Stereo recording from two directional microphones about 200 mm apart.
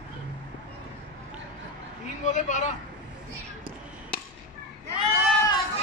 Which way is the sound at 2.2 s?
35° left (ahead or behind).